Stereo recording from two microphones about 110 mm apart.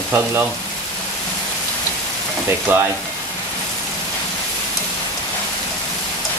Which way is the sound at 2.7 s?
15° right (ahead or behind).